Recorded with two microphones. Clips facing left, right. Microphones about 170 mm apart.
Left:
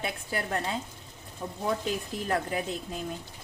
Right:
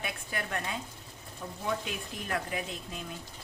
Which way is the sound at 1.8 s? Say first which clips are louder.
Left 7 dB; 35° left (ahead or behind).